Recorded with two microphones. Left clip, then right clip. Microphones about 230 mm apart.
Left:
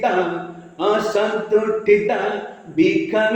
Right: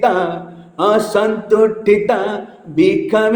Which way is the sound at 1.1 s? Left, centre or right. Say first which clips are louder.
Right 4 dB; right.